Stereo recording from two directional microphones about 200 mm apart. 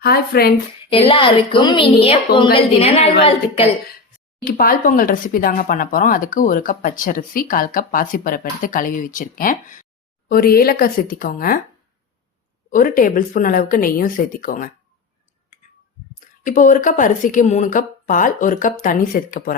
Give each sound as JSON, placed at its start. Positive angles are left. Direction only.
{"t": 0.0, "sound": "speech", "side_deg": 50}
{"t": 0.9, "sound": "a woman's voice", "side_deg": 30}
{"t": 4.4, "sound": "speech", "side_deg": 45}
{"t": 12.7, "sound": "speech", "side_deg": 45}
{"t": 15.6, "sound": "clicking", "side_deg": 35}
{"t": 16.4, "sound": "a woman's voice", "side_deg": 40}